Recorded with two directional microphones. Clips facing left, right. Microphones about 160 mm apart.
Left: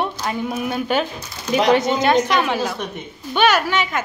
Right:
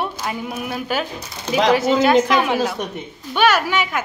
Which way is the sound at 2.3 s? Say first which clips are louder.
Right 2 dB; 10° right (ahead or behind).